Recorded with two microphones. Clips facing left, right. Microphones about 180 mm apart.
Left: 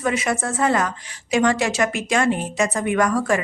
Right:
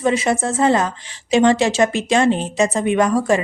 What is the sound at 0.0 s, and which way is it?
A woman's voice, 30° right (ahead or behind).